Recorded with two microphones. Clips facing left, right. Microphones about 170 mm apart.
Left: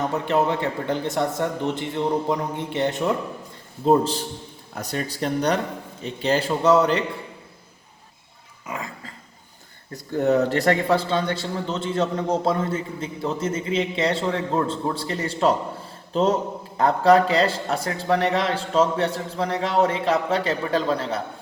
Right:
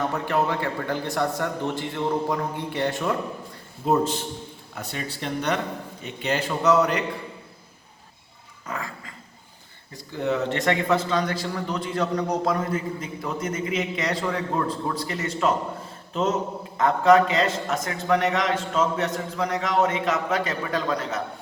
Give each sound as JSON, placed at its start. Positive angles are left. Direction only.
{"t": 0.1, "sound": "a man's voice", "side_deg": 20}
{"t": 3.8, "sound": "a man's voice", "side_deg": 30}
{"t": 8.6, "sound": "dog", "side_deg": 15}
{"t": 10.1, "sound": "a man's voice", "side_deg": 40}